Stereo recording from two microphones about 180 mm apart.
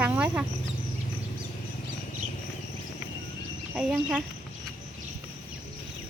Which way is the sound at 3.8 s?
5° right (ahead or behind).